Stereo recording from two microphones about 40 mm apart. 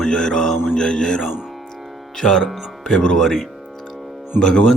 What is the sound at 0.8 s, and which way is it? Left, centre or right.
Music, left.